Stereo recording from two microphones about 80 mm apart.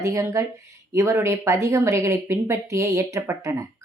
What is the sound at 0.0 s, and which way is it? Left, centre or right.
A woman's voice, right.